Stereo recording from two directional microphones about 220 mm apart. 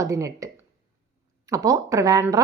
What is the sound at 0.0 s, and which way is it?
A woman's voice, 15° right (ahead or behind).